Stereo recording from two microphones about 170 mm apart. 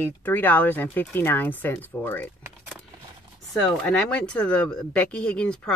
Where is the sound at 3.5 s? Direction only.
5° left (ahead or behind).